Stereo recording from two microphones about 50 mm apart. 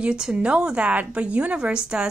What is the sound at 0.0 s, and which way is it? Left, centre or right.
A woman's voice, centre.